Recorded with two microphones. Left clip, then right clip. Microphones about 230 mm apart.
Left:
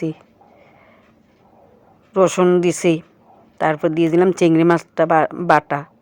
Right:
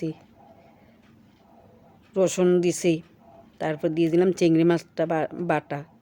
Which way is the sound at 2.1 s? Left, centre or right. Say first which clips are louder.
Left 7 dB; centre.